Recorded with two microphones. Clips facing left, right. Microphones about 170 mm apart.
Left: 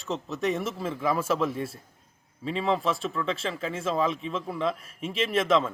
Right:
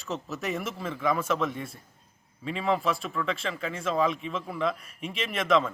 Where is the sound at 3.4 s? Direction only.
30° left (ahead or behind).